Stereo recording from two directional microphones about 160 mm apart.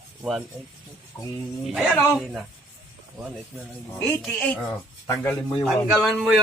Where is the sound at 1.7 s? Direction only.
Centre (ahead or behind).